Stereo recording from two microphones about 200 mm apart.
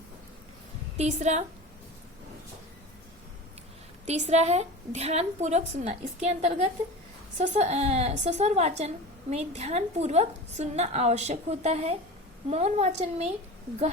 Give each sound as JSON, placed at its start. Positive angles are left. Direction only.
{"t": 0.9, "sound": "a woman's voice", "side_deg": -35}
{"t": 4.0, "sound": "a woman's voice", "side_deg": -35}